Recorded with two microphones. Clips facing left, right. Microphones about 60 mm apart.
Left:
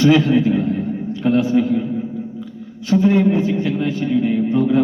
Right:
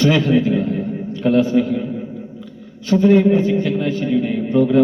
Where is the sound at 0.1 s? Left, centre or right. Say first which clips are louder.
Left 1 dB; centre.